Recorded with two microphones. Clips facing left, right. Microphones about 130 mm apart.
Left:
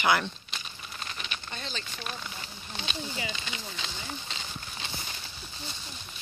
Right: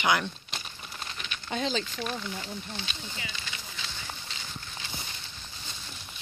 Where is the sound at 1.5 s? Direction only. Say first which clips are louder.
Right 13 dB; 90° right.